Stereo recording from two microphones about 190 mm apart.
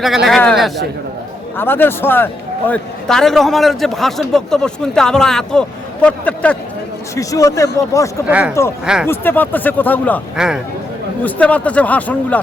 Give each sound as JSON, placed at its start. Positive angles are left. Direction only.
{"t": 0.3, "sound": "a man's voice", "side_deg": 0}
{"t": 1.5, "sound": "a man's voice", "side_deg": 10}
{"t": 7.2, "sound": "speech", "side_deg": 15}
{"t": 8.3, "sound": "speech", "side_deg": -5}
{"t": 9.0, "sound": "speech", "side_deg": 10}
{"t": 10.3, "sound": "a man's voice", "side_deg": -5}
{"t": 11.2, "sound": "speech", "side_deg": 10}